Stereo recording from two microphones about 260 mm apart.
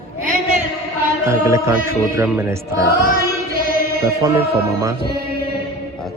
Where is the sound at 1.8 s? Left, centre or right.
Centre.